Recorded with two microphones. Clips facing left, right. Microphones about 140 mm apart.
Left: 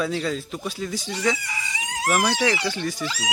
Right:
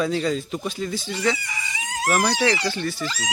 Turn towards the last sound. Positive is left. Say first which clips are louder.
# even
turn(degrees=10)  # may be behind; listen again after turning